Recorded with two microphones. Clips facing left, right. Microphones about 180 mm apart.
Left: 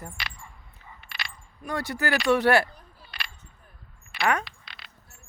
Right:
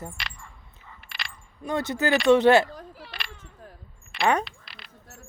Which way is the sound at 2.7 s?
90° right.